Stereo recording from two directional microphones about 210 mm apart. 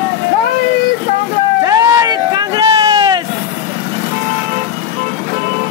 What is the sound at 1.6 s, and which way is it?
Vehicle, 15° right (ahead or behind).